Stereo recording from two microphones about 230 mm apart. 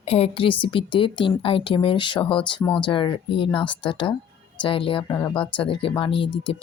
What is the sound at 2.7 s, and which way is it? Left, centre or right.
Speech, left.